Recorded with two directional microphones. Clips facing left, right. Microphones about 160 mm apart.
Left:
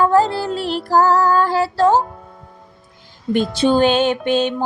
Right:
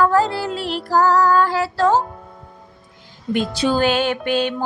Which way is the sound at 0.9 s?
30° left (ahead or behind).